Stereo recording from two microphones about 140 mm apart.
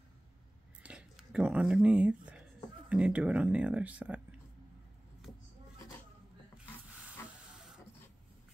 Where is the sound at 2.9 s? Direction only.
10° right (ahead or behind).